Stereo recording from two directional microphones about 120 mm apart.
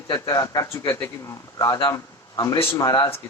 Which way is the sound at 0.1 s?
30° left (ahead or behind).